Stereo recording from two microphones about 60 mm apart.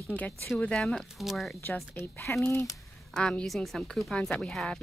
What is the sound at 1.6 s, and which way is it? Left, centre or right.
Speech, left.